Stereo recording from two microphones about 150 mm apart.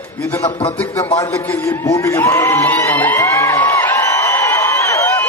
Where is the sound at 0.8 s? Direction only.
20° left (ahead or behind).